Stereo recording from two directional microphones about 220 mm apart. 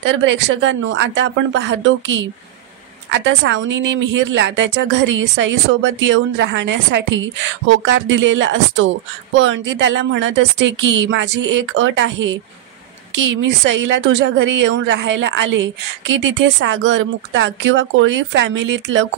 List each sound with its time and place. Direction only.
0.0 s a woman's voice: 55° right (ahead or behind)
13.7 s a woman's voice: 55° right (ahead or behind)